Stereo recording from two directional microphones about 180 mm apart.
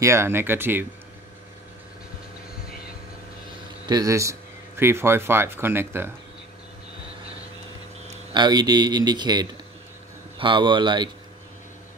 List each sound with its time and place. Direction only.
0.0 s speech: 15° right (ahead or behind)
3.8 s speech: 20° right (ahead or behind)
8.3 s speech: 25° right (ahead or behind)